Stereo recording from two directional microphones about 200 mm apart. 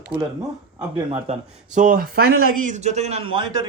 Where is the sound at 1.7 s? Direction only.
45° right (ahead or behind); by 3.6 s 25° right (ahead or behind).